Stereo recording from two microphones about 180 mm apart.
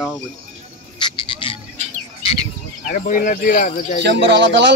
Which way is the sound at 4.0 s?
75° right (ahead or behind).